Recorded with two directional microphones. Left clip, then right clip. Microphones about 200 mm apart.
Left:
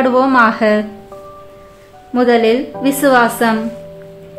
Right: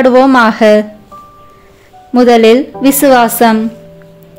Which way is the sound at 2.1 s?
35° right (ahead or behind).